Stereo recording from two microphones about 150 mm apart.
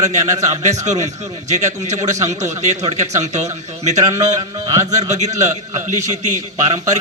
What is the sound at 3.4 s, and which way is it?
Speech, 50° right (ahead or behind).